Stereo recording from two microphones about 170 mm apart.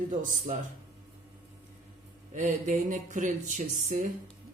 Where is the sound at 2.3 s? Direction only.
45° right (ahead or behind).